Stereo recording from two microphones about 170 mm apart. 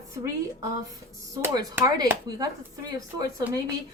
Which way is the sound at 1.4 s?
15° right (ahead or behind).